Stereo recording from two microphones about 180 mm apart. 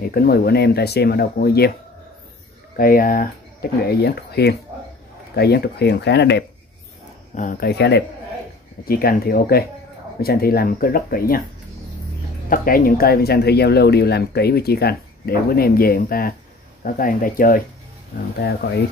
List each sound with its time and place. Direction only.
0.0 s speech: 55° left (ahead or behind)
2.8 s speech: 50° left (ahead or behind); by 6.4 s 70° left (ahead or behind)
7.3 s speech: 45° left (ahead or behind)
7.7 s speech: 70° left (ahead or behind)
8.8 s speech: 55° left (ahead or behind)
12.4 s speech: 50° left (ahead or behind)